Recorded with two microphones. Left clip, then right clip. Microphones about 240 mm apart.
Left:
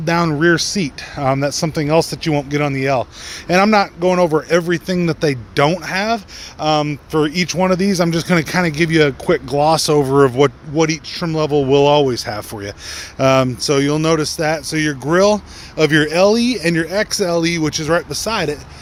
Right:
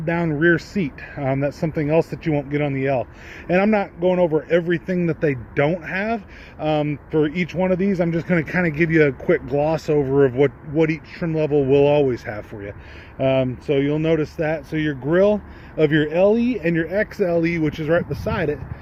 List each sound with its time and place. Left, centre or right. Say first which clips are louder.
0.3 s speech: left 4 dB; centre
10.1 s speech: left 3 dB; left
10.8 s speech: left 3 dB; centre
13.2 s speech: left 6 dB; left
13.9 s speech: left 4 dB; left
16.2 s speech: left 4 dB; left
16.6 s speech: left 4 dB; left